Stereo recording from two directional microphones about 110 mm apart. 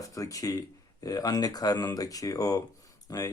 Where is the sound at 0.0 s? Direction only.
30° left (ahead or behind).